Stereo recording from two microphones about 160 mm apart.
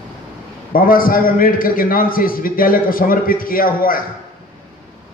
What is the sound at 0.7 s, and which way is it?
A man's voice, 60° left (ahead or behind).